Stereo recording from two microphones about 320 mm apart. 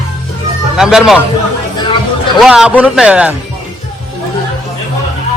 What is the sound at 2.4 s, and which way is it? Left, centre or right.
Speech, centre.